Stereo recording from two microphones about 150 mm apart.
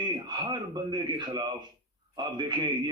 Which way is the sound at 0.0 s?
30° right (ahead or behind).